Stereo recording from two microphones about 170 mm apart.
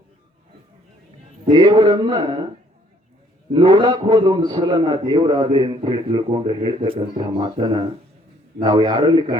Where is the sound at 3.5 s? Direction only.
30° right (ahead or behind).